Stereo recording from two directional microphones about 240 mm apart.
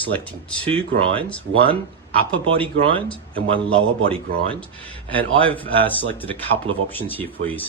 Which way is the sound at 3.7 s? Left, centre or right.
Right.